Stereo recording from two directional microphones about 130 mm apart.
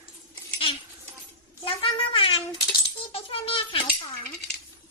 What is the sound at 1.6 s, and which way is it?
Cat, 45° left (ahead or behind).